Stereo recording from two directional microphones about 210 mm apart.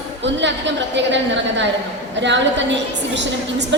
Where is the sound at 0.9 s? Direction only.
60° right (ahead or behind).